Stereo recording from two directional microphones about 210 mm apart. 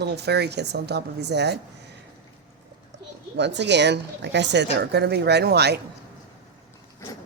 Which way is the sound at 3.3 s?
55° right (ahead or behind).